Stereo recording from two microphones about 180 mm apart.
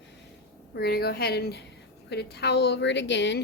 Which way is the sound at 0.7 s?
60° left (ahead or behind).